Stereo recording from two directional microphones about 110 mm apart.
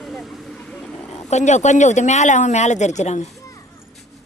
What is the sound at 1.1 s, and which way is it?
Speech, 90° left.